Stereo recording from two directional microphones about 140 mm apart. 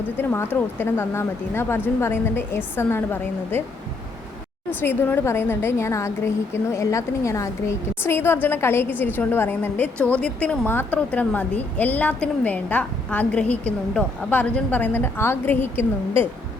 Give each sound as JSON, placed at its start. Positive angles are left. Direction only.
{"t": 0.2, "sound": "a woman's voice", "side_deg": 15}
{"t": 4.8, "sound": "a woman's voice", "side_deg": 15}